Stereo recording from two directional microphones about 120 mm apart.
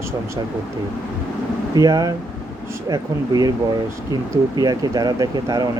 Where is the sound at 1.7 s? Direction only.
30° right (ahead or behind).